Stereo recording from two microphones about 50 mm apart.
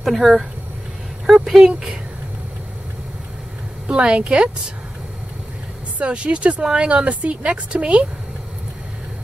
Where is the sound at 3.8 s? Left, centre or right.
Right.